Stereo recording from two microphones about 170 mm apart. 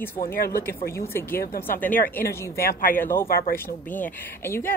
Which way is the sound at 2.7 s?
55° left (ahead or behind).